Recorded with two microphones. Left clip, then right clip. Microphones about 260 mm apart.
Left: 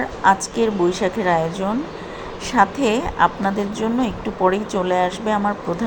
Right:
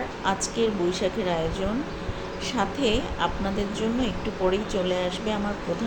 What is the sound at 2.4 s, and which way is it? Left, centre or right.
A woman's voice, left.